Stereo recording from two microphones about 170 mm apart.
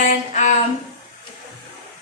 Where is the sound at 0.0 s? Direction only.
45° left (ahead or behind).